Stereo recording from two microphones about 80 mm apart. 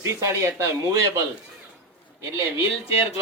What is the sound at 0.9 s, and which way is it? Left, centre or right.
Speech, right.